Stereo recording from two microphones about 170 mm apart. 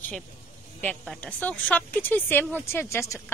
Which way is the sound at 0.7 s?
5° left (ahead or behind).